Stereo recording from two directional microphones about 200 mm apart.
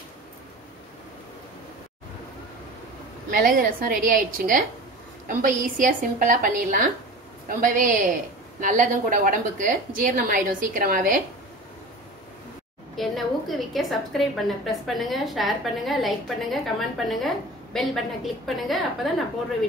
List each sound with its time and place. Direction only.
3.3 s a woman's voice: 45° right (ahead or behind)
12.9 s a woman's voice: centre (ahead or behind)